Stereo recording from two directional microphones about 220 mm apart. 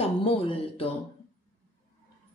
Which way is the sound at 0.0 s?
25° left (ahead or behind).